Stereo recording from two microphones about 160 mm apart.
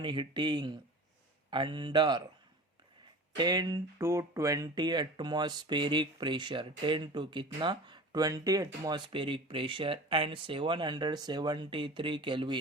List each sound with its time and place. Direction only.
0.0 s speech: 30° right (ahead or behind)
3.3 s speech: 25° right (ahead or behind)